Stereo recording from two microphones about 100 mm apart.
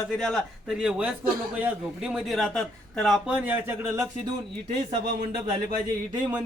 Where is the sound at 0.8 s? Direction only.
10° right (ahead or behind).